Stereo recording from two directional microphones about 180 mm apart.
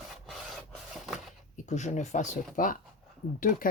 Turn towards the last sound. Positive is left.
turn(degrees=50)  # may be behind; listen again after turning